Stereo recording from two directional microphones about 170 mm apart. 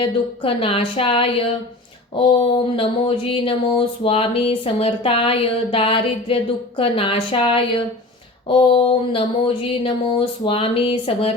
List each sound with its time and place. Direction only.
0.0 s speech: 35° left (ahead or behind)